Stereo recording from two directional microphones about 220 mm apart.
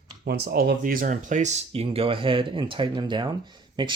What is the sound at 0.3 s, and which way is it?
Speech, 45° right (ahead or behind).